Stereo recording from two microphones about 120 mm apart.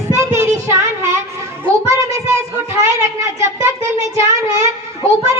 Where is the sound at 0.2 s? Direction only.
20° right (ahead or behind).